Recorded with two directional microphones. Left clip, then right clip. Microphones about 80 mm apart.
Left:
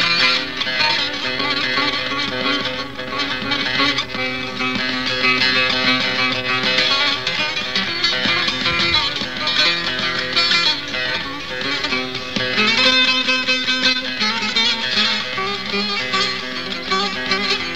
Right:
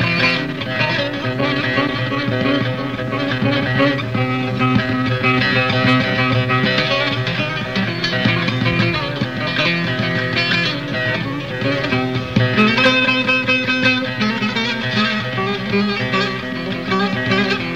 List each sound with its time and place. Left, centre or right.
0.0 s music: right
5.2 s music: right
10.3 s music: right
11.9 s music: right